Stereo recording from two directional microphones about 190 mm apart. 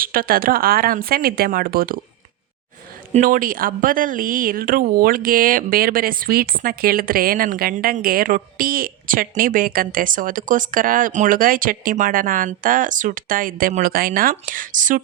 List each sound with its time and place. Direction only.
0.0 s speech: 50° right (ahead or behind)
3.1 s speech: 45° right (ahead or behind)